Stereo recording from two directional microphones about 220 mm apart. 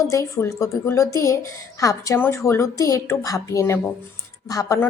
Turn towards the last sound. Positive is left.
turn(degrees=15)  # may be behind; listen again after turning